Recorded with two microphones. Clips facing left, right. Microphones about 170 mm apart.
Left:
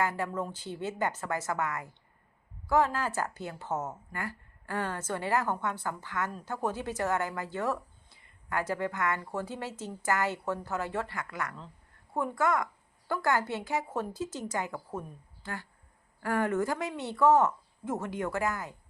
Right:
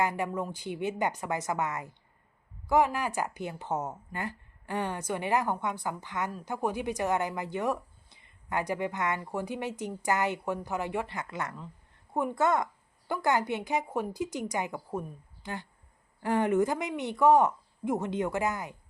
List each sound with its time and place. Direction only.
0.0 s a woman's voice: 15° right (ahead or behind)